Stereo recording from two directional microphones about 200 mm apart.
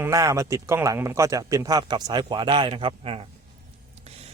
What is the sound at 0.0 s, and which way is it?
A man's voice, 15° right (ahead or behind).